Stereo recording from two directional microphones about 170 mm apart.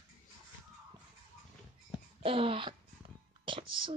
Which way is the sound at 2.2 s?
35° right (ahead or behind).